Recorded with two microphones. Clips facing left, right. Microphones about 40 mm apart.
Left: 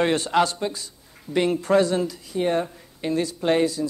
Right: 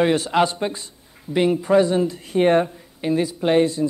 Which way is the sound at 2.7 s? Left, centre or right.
Centre.